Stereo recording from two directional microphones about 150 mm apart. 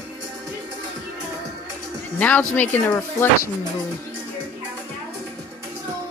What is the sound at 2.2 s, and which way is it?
Speech, 10° left (ahead or behind).